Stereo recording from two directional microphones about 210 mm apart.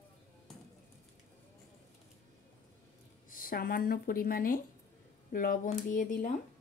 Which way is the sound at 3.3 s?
45° left (ahead or behind).